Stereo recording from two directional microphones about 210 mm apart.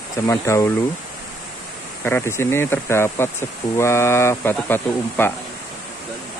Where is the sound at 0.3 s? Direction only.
15° left (ahead or behind).